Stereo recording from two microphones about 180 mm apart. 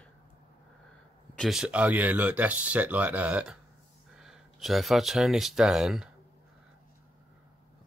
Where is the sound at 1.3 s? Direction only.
Centre (ahead or behind).